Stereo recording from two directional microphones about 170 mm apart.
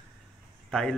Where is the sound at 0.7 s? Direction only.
5° left (ahead or behind).